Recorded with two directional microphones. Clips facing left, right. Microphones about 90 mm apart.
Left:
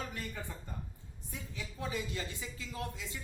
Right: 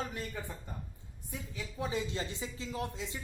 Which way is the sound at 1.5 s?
20° right (ahead or behind).